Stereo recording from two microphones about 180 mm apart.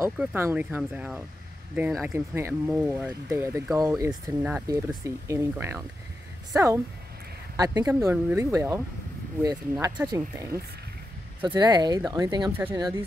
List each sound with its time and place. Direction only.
0.0 s speech: 10° right (ahead or behind)